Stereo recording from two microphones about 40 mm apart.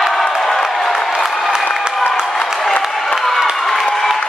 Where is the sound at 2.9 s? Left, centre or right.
Centre.